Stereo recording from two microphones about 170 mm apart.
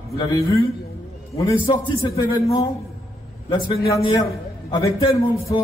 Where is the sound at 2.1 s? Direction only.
20° left (ahead or behind).